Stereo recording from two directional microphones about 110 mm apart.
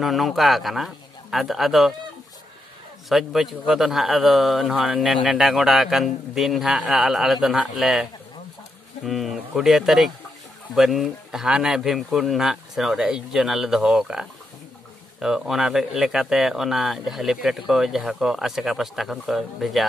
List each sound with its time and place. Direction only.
0.0 s speech: centre (ahead or behind)
3.1 s speech: centre (ahead or behind)